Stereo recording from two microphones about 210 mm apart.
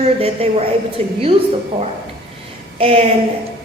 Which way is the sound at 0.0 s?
30° right (ahead or behind).